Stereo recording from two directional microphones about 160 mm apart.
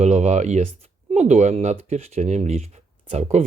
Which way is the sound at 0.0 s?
45° right (ahead or behind).